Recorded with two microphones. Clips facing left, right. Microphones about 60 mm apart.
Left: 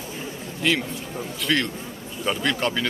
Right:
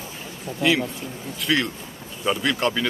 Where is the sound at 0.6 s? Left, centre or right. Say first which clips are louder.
Right 2 dB; centre.